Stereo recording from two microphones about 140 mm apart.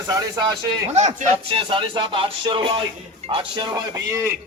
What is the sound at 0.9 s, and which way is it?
Speech, 55° right (ahead or behind).